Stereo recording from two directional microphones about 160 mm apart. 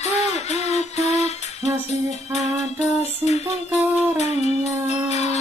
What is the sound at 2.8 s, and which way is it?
Music, 45° left (ahead or behind).